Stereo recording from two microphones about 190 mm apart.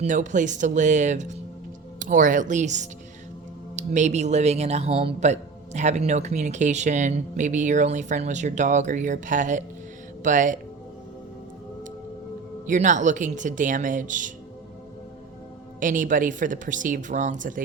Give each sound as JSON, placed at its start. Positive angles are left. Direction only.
{"t": 0.0, "sound": "speech", "side_deg": -40}
{"t": 12.6, "sound": "speech", "side_deg": -40}
{"t": 15.8, "sound": "a woman's voice", "side_deg": -45}